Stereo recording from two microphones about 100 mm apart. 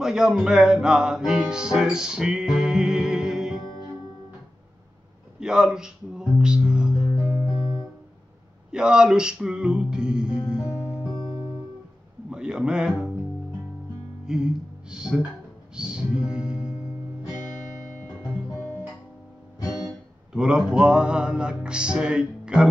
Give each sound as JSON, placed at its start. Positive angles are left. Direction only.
{"t": 0.0, "sound": "music", "side_deg": -5}
{"t": 5.4, "sound": "speech", "side_deg": -5}
{"t": 7.5, "sound": "music", "side_deg": 50}
{"t": 8.7, "sound": "music", "side_deg": -10}
{"t": 11.1, "sound": "music", "side_deg": 60}
{"t": 12.3, "sound": "a sound", "side_deg": -10}
{"t": 14.2, "sound": "speech", "side_deg": -5}
{"t": 15.7, "sound": "music", "side_deg": -10}
{"t": 20.3, "sound": "music", "side_deg": -10}